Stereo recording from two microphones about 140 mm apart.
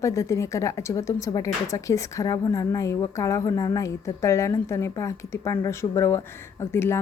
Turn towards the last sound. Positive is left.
turn(degrees=15)  # may be behind; listen again after turning